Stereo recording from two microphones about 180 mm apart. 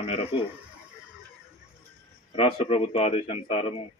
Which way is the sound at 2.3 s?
30° left (ahead or behind).